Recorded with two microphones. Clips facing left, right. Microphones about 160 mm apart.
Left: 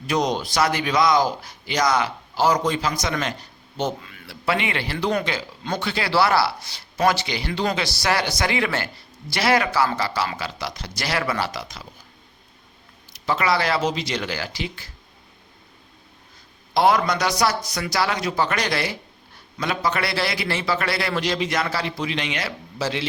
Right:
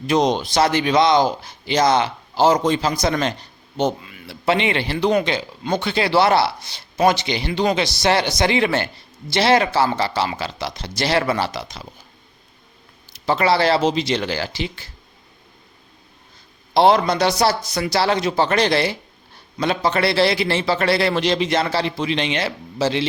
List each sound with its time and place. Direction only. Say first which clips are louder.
0.1 s speech: right 5 dB; 25° right (ahead or behind)
3.8 s speech: right 5 dB; 15° right (ahead or behind)
13.1 s speech: right 4 dB; 30° right (ahead or behind)
16.7 s speech: right 4 dB; 30° right (ahead or behind)